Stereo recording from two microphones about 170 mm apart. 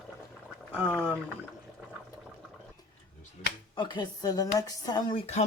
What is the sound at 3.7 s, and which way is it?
A woman's voice, 25° left (ahead or behind).